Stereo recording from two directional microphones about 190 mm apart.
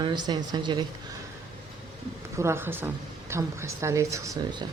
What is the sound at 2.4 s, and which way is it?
Speech, 15° right (ahead or behind).